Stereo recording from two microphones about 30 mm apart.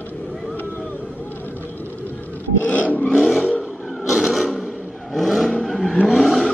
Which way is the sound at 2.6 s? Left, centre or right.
Left.